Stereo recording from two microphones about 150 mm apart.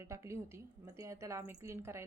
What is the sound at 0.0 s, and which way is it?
A woman's voice, 20° right (ahead or behind).